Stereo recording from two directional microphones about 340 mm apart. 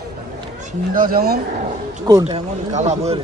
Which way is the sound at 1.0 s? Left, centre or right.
Right.